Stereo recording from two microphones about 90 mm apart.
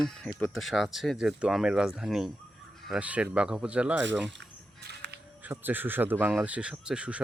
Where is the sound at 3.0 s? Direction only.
15° right (ahead or behind).